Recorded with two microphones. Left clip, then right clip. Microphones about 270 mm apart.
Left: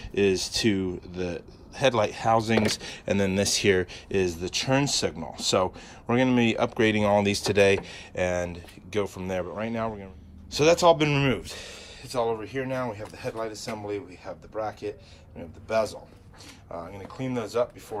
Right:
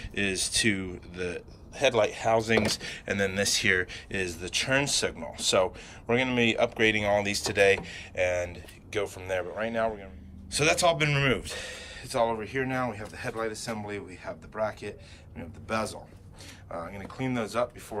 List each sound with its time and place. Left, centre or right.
0.1 s speech: centre